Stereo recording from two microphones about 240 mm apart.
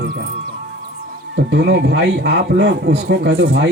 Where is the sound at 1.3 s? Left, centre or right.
Right.